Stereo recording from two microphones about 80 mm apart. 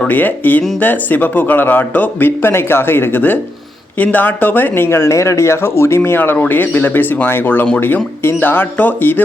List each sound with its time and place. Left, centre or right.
0.1 s speech: left